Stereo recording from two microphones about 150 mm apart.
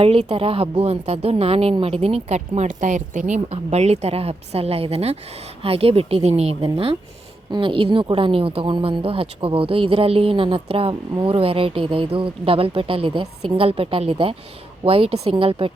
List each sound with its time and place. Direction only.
0.0 s a woman's voice: 40° right (ahead or behind)